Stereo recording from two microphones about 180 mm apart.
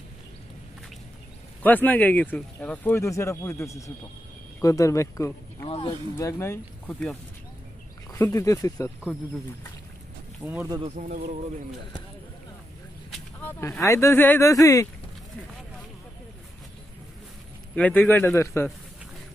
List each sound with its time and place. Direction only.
1.6 s speech: 10° left (ahead or behind)
5.7 s a sound: 30° left (ahead or behind)
6.1 s speech: 15° left (ahead or behind)
8.1 s speech: 15° left (ahead or behind)
10.4 s speech: 10° right (ahead or behind)
11.0 s speech: 45° right (ahead or behind)
13.4 s speech: 15° left (ahead or behind)
17.7 s speech: 10° left (ahead or behind)